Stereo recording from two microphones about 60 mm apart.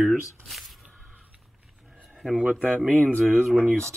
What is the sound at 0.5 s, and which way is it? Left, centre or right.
Squish, centre.